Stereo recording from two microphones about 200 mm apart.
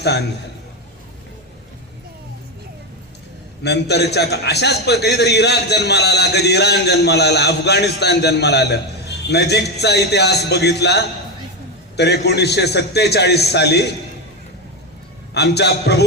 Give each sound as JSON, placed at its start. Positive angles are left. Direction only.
{"t": 0.0, "sound": "a man's voice", "side_deg": 55}
{"t": 3.6, "sound": "a man's voice", "side_deg": 55}
{"t": 15.3, "sound": "a man's voice", "side_deg": 55}